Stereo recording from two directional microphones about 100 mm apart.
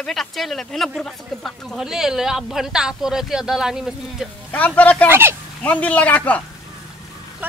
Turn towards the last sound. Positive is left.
turn(degrees=15)  # may be behind; listen again after turning